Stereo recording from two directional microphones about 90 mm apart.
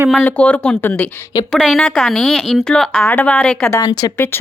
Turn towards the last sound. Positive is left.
turn(degrees=25)  # may be behind; listen again after turning